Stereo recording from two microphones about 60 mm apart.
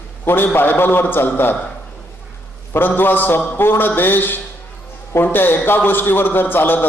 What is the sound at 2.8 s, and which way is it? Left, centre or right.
A man's voice, left.